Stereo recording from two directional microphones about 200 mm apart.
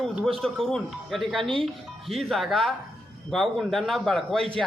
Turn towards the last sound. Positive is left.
turn(degrees=0)  # may be behind; listen again after turning